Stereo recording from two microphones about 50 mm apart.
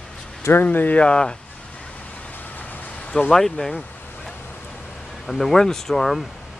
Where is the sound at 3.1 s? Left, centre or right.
Left.